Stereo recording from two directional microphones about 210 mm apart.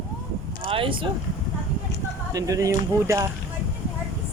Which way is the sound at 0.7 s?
25° right (ahead or behind).